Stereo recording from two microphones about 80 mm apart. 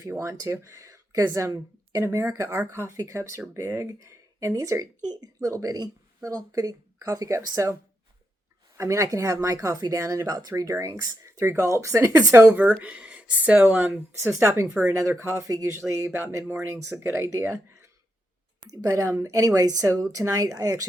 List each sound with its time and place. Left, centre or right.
0.1 s a woman's voice: right
8.8 s a woman's voice: right
11.3 s speech: right
12.5 s speech: right
14.3 s speech: right
14.7 s speech: right
14.9 s speech: right
18.6 s a woman's voice: right